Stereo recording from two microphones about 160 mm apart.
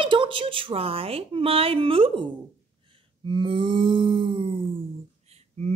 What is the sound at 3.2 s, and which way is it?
Speech, 30° right (ahead or behind).